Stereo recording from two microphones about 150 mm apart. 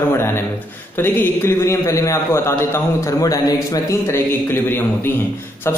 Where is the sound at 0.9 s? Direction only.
15° left (ahead or behind).